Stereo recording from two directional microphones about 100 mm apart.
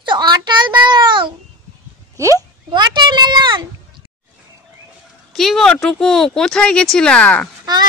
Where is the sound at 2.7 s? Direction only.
50° right (ahead or behind).